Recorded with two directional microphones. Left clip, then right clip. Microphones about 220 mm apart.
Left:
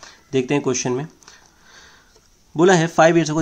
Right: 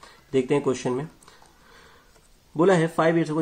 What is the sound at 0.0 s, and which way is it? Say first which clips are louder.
Speech: left 3 dB; 35° left (ahead or behind).